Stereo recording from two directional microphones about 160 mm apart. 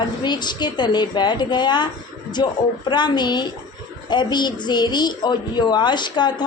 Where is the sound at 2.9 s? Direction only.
25° left (ahead or behind).